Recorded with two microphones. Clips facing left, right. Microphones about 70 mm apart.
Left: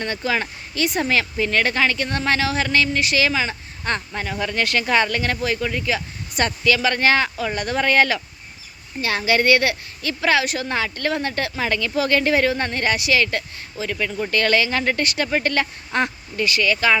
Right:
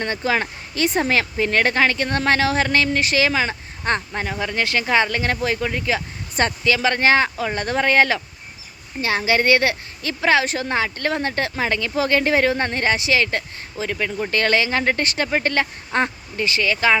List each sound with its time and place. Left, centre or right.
0.0 s a woman's voice: right